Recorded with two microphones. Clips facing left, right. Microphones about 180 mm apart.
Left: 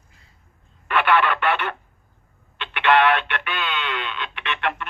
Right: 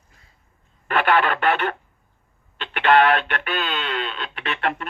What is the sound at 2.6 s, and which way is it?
Speech, 40° right (ahead or behind).